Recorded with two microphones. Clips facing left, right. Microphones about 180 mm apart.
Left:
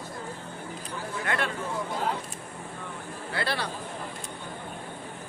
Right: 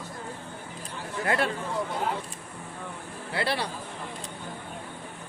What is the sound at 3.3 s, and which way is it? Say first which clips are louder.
Speech: right 2 dB; 25° right (ahead or behind).